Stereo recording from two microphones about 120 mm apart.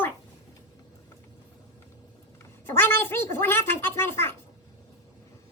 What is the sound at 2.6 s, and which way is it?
A woman's voice, 20° left (ahead or behind).